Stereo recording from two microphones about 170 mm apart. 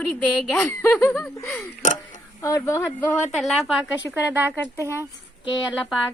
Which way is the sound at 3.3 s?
Centre (ahead or behind).